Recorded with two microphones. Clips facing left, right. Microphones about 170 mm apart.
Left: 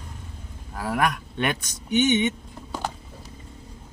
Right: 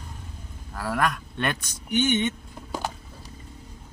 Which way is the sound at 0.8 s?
15° left (ahead or behind).